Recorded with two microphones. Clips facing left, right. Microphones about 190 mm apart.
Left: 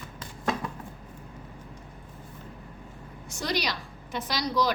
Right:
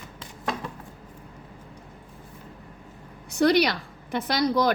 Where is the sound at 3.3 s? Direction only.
60° right (ahead or behind).